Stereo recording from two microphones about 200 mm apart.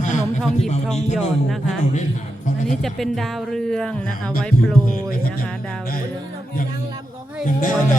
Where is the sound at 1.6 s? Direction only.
35° left (ahead or behind).